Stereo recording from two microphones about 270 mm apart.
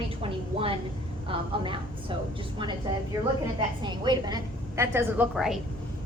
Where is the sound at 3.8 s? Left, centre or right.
Centre.